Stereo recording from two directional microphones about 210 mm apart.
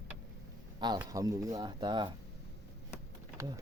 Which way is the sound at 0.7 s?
20° right (ahead or behind).